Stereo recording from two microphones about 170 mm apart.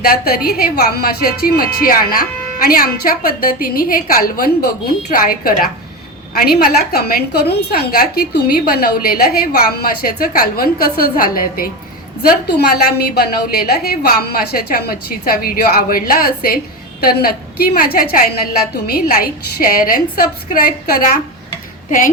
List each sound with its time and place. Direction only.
0.0 s a woman's voice: 60° left (ahead or behind)
21.8 s speech: 50° left (ahead or behind)